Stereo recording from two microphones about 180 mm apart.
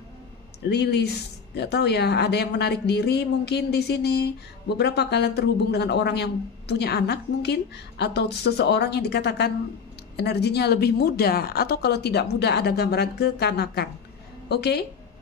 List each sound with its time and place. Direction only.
0.7 s speech: 65° left (ahead or behind)